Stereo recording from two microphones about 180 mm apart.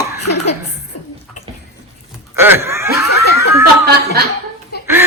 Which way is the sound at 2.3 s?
15° right (ahead or behind).